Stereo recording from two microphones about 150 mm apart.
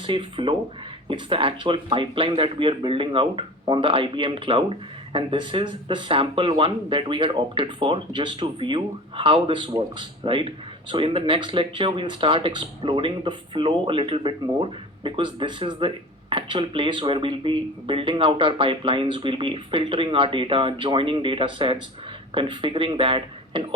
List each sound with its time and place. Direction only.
0.1 s speech: 35° right (ahead or behind)